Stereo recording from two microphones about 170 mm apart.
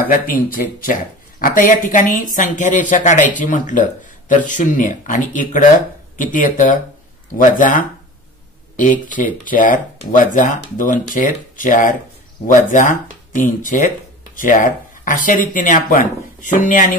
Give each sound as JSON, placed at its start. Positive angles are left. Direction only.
{"t": 0.0, "sound": "speech", "side_deg": 55}